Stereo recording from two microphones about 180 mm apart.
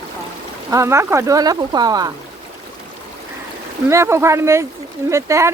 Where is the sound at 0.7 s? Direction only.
15° right (ahead or behind).